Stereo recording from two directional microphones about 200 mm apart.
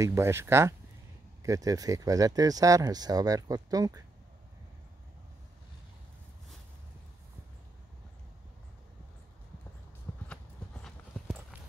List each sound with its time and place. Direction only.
0.0 s speech: 15° right (ahead or behind)
10.2 s clip-clop: 5° left (ahead or behind)